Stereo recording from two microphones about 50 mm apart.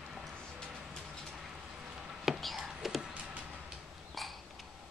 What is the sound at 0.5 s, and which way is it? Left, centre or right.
Music, centre.